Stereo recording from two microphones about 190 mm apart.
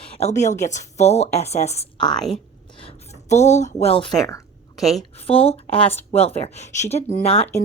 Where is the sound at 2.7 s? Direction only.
30° left (ahead or behind).